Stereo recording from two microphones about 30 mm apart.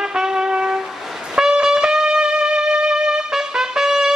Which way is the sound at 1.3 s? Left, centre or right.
Right.